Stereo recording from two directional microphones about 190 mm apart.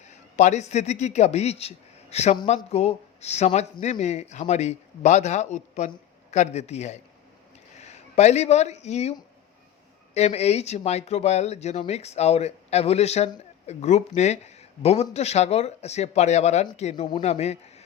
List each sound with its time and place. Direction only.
0.0 s a man's voice: 40° left (ahead or behind)
10.2 s speech: 35° left (ahead or behind)
16.9 s speech: 25° left (ahead or behind)
17.2 s speech: 35° left (ahead or behind)